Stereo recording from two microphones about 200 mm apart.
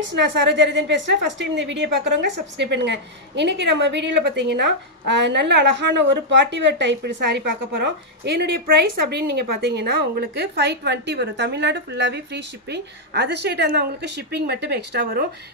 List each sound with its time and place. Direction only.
0.0 s a woman's voice: 65° right (ahead or behind)